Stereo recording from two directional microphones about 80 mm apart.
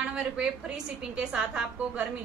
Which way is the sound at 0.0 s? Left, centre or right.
Centre.